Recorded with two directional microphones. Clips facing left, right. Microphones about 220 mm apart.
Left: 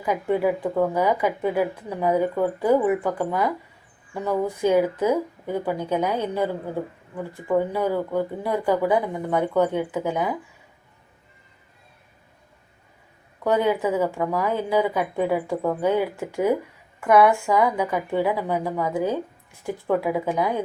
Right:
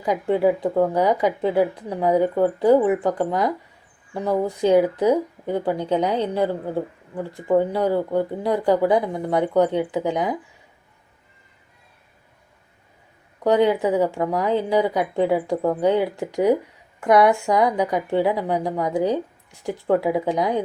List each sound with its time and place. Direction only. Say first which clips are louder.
0.0 s speech: right 3 dB; 20° right (ahead or behind)
7.3 s speech: right 3 dB; 15° right (ahead or behind)
13.4 s speech: right 3 dB; 15° right (ahead or behind)